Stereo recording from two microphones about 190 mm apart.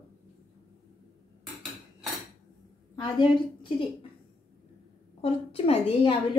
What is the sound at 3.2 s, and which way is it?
Speech, 25° left (ahead or behind).